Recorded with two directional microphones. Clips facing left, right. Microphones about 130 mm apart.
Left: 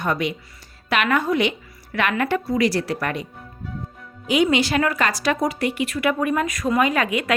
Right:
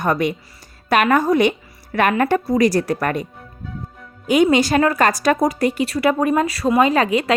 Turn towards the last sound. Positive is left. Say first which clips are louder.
# right 5 dB
turn(degrees=-30)  # may be behind; listen again after turning